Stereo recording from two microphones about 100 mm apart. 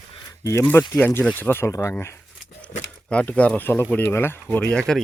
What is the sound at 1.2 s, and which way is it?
Speech, 15° left (ahead or behind).